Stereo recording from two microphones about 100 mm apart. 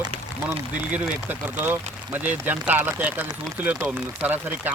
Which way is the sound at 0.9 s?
15° right (ahead or behind).